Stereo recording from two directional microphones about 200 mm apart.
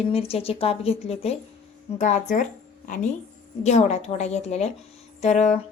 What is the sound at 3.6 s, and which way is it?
Speech, 35° left (ahead or behind).